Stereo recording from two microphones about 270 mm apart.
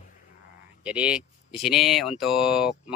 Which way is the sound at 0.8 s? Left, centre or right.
Centre.